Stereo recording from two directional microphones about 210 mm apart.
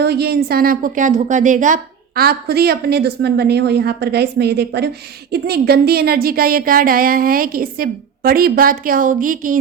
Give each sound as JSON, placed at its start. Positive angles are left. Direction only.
{"t": 0.0, "sound": "a woman's voice", "side_deg": -50}